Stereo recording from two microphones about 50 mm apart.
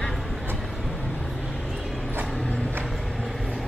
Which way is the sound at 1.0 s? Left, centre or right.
Left.